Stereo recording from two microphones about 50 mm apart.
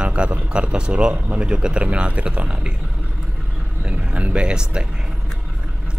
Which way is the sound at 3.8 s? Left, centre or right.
Right.